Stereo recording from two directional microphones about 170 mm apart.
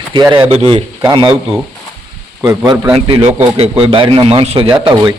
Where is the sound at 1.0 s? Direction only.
25° right (ahead or behind).